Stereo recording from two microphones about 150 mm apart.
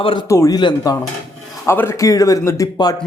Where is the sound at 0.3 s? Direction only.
20° left (ahead or behind).